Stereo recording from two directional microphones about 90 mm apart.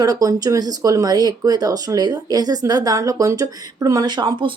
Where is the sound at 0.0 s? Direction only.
40° right (ahead or behind).